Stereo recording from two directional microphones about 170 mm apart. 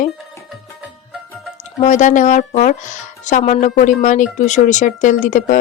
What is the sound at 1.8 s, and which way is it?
A woman's voice, 45° left (ahead or behind).